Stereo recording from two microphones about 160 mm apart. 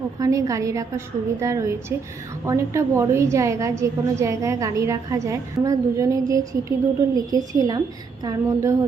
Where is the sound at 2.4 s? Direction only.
20° right (ahead or behind).